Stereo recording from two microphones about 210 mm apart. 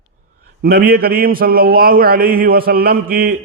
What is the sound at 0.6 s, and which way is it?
A man's voice, 45° right (ahead or behind).